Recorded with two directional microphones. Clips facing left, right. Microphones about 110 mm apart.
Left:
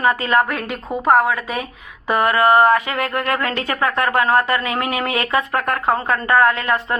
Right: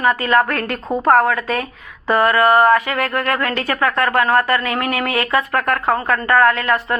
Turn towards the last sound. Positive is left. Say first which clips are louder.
# right 2 dB
turn(degrees=20)  # may be behind; listen again after turning